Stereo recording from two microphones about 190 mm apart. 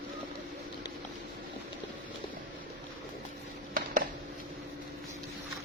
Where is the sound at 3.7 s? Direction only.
45° right (ahead or behind).